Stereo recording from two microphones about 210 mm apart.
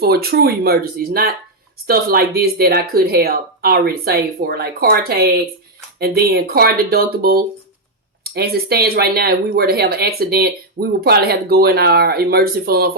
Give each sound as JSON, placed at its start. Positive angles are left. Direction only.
{"t": 0.0, "sound": "speech", "side_deg": -50}